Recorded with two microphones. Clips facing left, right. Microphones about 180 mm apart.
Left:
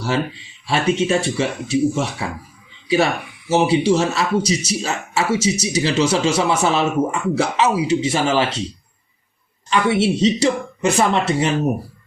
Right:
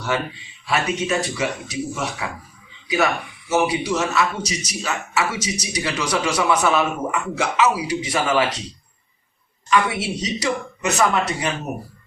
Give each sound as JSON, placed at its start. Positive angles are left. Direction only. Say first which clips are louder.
{"t": 0.7, "sound": "a man's voice", "louder": "left 4 dB", "side_deg": 25}
{"t": 9.6, "sound": "a man's voice", "louder": "left 4 dB", "side_deg": 30}